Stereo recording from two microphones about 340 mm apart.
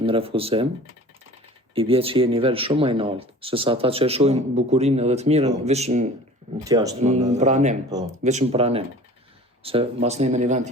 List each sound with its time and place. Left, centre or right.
0.0 s speech: centre
1.7 s speech: centre